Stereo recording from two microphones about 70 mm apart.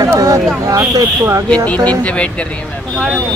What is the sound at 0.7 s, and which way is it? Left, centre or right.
Speech, right.